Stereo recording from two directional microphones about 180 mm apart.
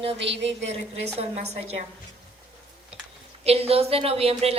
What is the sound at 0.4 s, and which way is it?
Speech, 35° right (ahead or behind).